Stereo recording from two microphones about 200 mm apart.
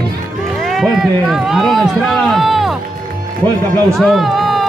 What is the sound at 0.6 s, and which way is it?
Speech, centre (ahead or behind).